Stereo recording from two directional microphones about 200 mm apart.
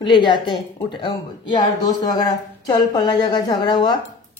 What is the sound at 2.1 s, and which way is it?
A woman's voice, 20° left (ahead or behind).